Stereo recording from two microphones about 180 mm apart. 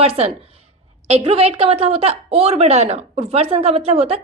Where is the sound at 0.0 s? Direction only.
35° right (ahead or behind).